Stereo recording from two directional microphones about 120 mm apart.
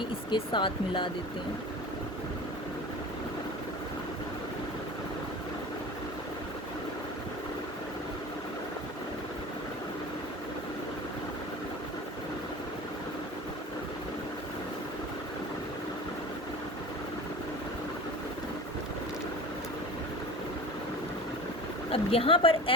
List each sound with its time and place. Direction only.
0.3 s speech: 45° left (ahead or behind)
21.9 s speech: 50° left (ahead or behind)